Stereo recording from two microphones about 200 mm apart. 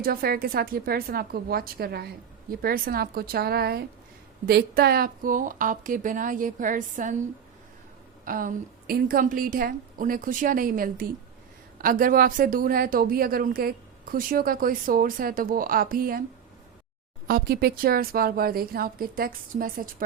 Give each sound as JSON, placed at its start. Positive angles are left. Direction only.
{"t": 0.0, "sound": "a woman's voice", "side_deg": -50}
{"t": 8.2, "sound": "a woman's voice", "side_deg": -45}
{"t": 17.2, "sound": "a woman's voice", "side_deg": -50}